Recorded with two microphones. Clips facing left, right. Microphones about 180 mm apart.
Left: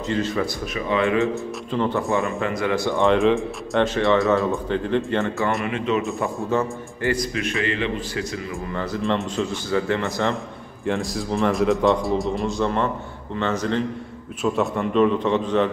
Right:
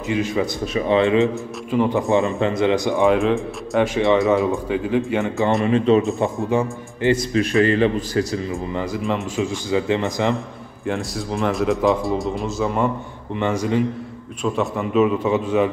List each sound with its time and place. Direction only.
0.1 s speech: 15° right (ahead or behind)
0.7 s a man's voice: 30° right (ahead or behind)
3.1 s a man's voice: centre (ahead or behind)
3.8 s speech: 15° right (ahead or behind)
5.6 s a man's voice: 35° right (ahead or behind)
6.1 s a man's voice: 15° right (ahead or behind)
7.3 s a man's voice: 35° right (ahead or behind)
9.0 s speech: 10° right (ahead or behind)
10.9 s a man's voice: centre (ahead or behind)
14.4 s speech: centre (ahead or behind)